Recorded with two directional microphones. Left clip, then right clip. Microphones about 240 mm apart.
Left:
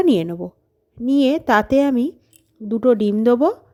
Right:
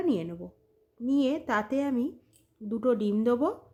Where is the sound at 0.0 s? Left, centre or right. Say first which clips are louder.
Left 12 dB; left.